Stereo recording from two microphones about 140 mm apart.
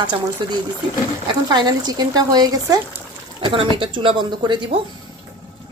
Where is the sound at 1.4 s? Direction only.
30° right (ahead or behind).